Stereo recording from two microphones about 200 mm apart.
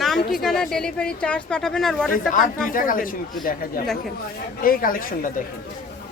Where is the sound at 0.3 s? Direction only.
Centre (ahead or behind).